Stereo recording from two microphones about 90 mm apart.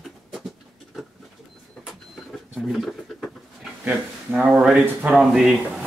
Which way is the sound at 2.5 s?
5° right (ahead or behind).